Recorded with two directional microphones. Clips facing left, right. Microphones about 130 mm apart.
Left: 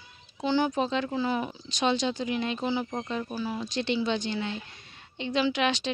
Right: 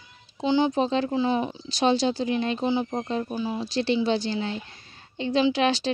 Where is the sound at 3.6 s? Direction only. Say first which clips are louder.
Right 5 dB; 35° right (ahead or behind).